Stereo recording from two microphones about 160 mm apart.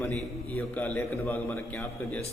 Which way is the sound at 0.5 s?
10° left (ahead or behind).